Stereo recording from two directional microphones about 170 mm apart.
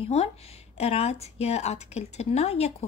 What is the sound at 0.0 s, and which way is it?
A woman's voice, 35° left (ahead or behind).